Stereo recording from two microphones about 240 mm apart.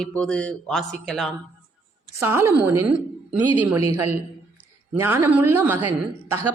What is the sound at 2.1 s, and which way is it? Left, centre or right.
A man's voice, centre.